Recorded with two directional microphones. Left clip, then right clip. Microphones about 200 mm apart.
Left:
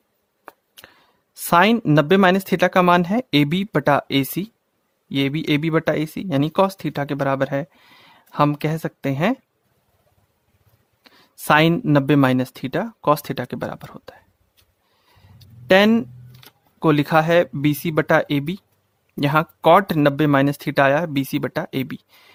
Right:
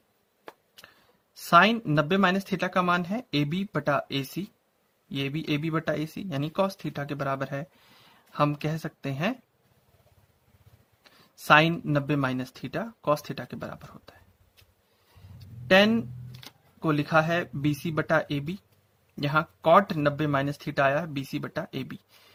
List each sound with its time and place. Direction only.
1.5 s speech: 50° left (ahead or behind)
11.0 s speech: 50° left (ahead or behind)
15.6 s speech: 50° left (ahead or behind)